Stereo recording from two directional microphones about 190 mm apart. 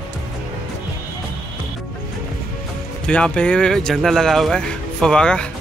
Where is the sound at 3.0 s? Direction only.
5° left (ahead or behind).